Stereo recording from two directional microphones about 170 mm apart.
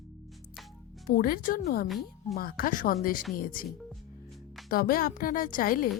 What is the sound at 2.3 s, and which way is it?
A woman's voice, 60° left (ahead or behind).